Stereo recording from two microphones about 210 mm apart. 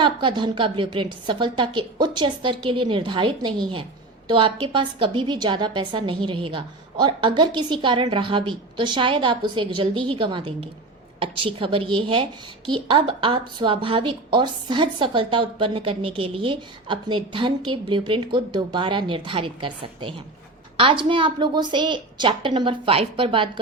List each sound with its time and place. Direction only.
0.0 s a woman's voice: 25° right (ahead or behind)